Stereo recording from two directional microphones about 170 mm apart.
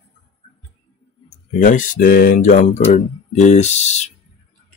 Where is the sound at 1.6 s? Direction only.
50° left (ahead or behind).